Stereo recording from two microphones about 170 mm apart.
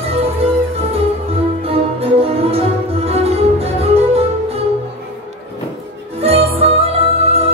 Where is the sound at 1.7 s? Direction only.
35° right (ahead or behind).